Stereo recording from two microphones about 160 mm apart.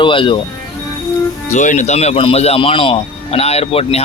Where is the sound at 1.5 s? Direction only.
50° left (ahead or behind).